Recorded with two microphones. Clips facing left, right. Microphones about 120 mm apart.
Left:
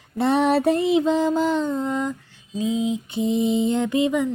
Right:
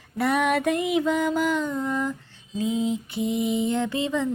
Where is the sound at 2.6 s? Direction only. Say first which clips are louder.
Left 2 dB; 15° left (ahead or behind).